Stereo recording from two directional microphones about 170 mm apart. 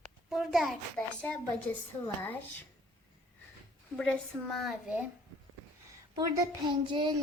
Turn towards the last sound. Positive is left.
turn(degrees=-25)  # may be behind; listen again after turning